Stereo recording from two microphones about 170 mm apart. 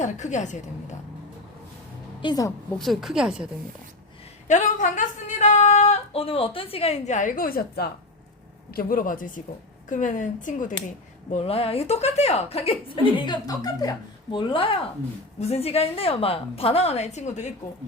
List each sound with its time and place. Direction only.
0.0 s a woman's voice: 45° left (ahead or behind)
2.2 s a woman's voice: 20° left (ahead or behind)
2.7 s a woman's voice: centre (ahead or behind)
4.4 s a woman's voice: 45° left (ahead or behind)
11.3 s a woman's voice: 40° left (ahead or behind)